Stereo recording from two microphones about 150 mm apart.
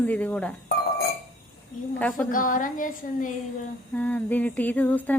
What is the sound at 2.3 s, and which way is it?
Speech, 65° left (ahead or behind).